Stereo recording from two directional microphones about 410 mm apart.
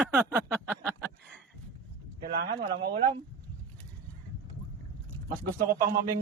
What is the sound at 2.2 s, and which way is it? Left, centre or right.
Speech, right.